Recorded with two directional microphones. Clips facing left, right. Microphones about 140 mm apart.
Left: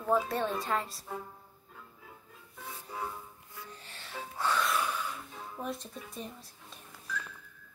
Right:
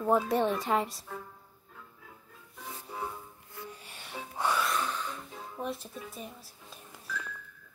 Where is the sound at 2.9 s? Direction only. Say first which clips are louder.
Even; 10° right (ahead or behind).